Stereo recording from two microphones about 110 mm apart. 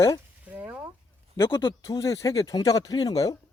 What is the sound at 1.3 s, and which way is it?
Speech, 25° left (ahead or behind).